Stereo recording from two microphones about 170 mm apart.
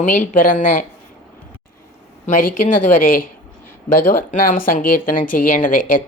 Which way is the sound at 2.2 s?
50° left (ahead or behind).